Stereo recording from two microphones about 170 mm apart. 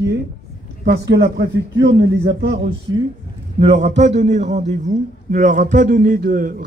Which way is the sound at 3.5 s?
40° right (ahead or behind).